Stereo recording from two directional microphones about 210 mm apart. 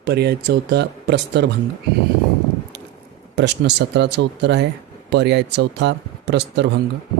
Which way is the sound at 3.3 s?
55° right (ahead or behind).